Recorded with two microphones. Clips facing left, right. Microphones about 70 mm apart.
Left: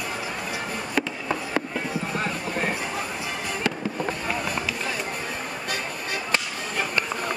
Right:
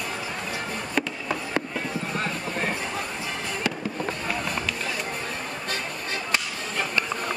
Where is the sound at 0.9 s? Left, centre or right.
Centre.